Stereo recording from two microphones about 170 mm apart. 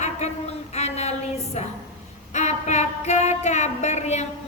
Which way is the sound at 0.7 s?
40° left (ahead or behind).